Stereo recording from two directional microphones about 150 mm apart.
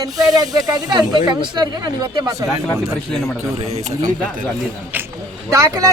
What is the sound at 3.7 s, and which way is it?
Speech, 45° right (ahead or behind).